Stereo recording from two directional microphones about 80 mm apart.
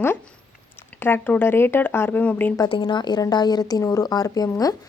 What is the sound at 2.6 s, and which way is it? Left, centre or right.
Speech, left.